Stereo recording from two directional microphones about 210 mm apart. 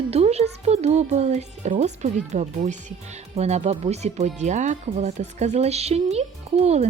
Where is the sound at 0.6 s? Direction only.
30° right (ahead or behind).